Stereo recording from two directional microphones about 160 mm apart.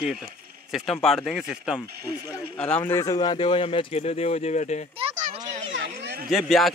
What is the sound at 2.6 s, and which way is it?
Speech, 10° left (ahead or behind).